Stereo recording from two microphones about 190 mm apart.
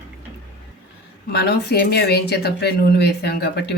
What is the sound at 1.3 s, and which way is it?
Speech, 60° left (ahead or behind).